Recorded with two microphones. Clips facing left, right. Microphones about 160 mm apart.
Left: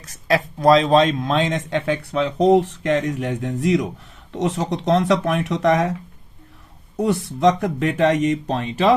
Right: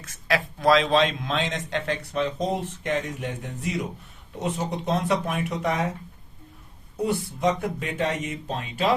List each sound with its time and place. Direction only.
0.0 s a man's voice: 40° left (ahead or behind); by 5.9 s 85° left
7.0 s speech: 90° left